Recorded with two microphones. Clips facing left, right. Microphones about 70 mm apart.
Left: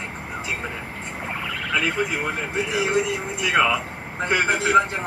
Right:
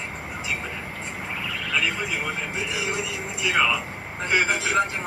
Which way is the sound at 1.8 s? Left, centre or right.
Left.